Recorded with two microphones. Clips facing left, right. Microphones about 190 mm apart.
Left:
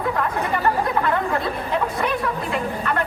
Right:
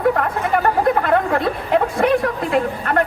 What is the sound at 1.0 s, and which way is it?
Chatter, 65° right (ahead or behind).